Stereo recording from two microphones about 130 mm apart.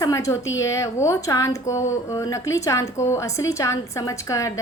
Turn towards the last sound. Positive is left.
turn(degrees=25)  # may be behind; listen again after turning